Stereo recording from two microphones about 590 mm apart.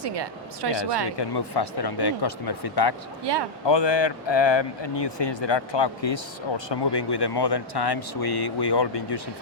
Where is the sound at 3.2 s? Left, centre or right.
Right.